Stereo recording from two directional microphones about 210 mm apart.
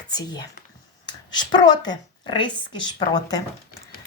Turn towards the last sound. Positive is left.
turn(degrees=20)  # may be behind; listen again after turning